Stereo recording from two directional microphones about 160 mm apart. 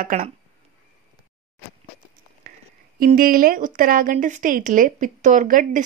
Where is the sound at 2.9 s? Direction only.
65° right (ahead or behind).